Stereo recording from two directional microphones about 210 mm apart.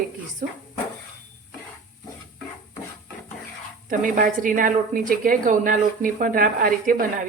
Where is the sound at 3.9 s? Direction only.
40° right (ahead or behind).